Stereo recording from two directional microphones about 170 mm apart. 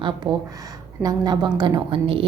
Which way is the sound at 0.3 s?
30° right (ahead or behind).